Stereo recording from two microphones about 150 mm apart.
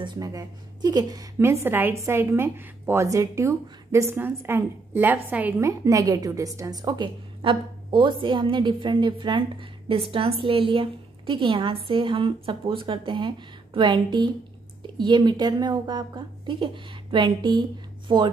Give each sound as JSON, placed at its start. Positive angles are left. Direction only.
{"t": 0.0, "sound": "a woman's voice", "side_deg": -25}